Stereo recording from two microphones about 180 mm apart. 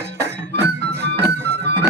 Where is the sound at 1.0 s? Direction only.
70° right (ahead or behind).